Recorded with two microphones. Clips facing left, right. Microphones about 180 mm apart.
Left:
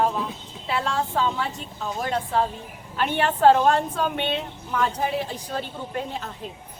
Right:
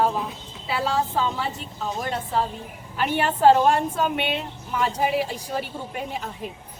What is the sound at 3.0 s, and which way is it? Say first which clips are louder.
A woman's voice: even; 5° right (ahead or behind).